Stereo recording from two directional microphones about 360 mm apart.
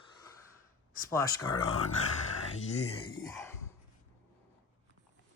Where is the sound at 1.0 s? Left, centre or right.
Centre.